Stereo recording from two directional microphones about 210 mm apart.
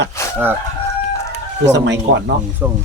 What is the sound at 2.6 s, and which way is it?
Speech, 10° right (ahead or behind).